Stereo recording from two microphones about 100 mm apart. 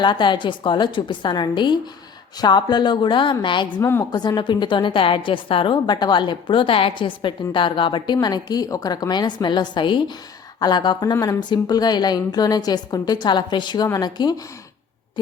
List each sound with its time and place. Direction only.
0.0 s a woman's voice: 50° left (ahead or behind)
3.8 s a woman's voice: 25° left (ahead or behind)
4.1 s a woman's voice: 45° left (ahead or behind)
13.8 s a woman's voice: 40° left (ahead or behind)